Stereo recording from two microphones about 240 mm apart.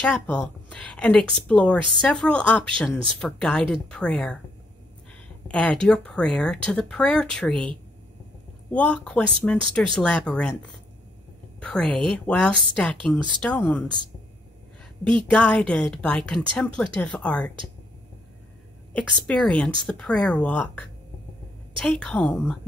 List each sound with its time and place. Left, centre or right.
0.0 s a woman's voice: centre
5.5 s a woman's voice: centre
8.7 s a woman's voice: centre
11.6 s a woman's voice: centre
15.0 s a woman's voice: centre
19.2 s a woman's voice: centre